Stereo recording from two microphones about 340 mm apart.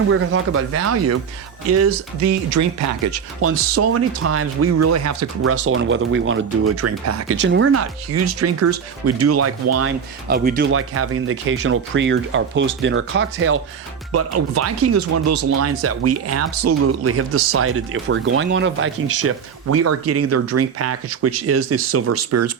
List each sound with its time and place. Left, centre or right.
0.1 s speech: right
7.4 s speech: right
10.2 s speech: right